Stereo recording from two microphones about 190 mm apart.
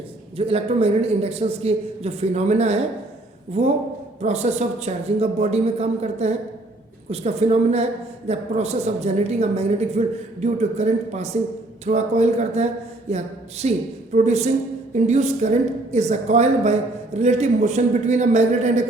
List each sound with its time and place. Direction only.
0.3 s speech: 30° right (ahead or behind)
4.2 s speech: 35° right (ahead or behind)